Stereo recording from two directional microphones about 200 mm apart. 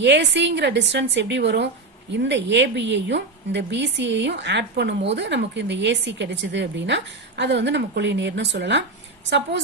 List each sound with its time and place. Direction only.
0.0 s a woman's voice: 60° right (ahead or behind)